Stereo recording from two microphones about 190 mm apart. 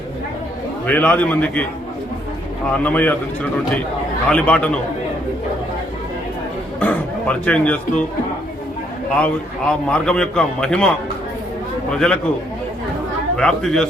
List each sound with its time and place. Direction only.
0.9 s a man's voice: 10° left (ahead or behind)
2.7 s a man's voice: 10° left (ahead or behind)
4.3 s a man's voice: 5° left (ahead or behind)
6.7 s speech: 5° left (ahead or behind)
9.2 s a man's voice: 5° left (ahead or behind)
13.3 s a man's voice: 5° left (ahead or behind)